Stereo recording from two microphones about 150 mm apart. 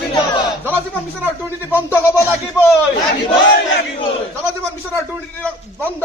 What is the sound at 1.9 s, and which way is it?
Speech, 15° left (ahead or behind).